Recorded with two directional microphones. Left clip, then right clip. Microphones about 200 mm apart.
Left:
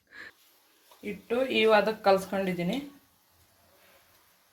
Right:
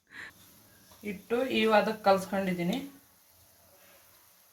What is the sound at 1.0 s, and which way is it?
Speech, 40° left (ahead or behind).